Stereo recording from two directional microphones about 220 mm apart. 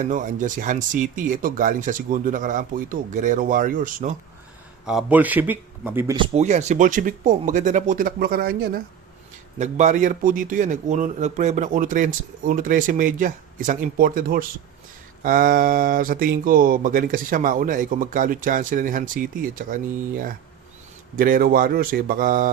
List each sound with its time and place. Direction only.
0.0 s speech: 35° right (ahead or behind)
4.9 s speech: 5° right (ahead or behind)
6.1 s speech: 25° right (ahead or behind)